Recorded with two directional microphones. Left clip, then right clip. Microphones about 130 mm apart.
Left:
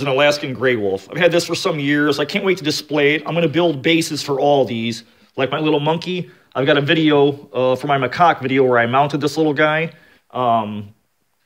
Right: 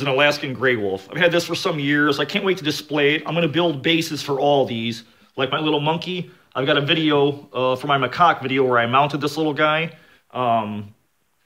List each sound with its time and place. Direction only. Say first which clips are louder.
0.0 s speech: left 3 dB; 20° left (ahead or behind)
5.3 s speech: left 3 dB; 35° left (ahead or behind)